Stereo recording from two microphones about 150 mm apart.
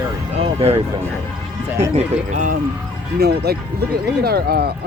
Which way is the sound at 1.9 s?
55° right (ahead or behind).